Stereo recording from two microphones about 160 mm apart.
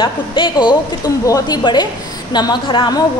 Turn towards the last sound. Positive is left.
turn(degrees=30)  # may be behind; listen again after turning